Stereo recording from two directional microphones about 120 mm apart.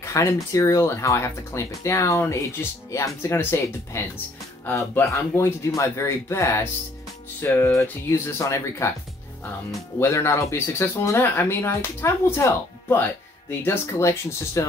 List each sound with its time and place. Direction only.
0.0 s speech: 25° left (ahead or behind)
9.9 s speech: 20° left (ahead or behind)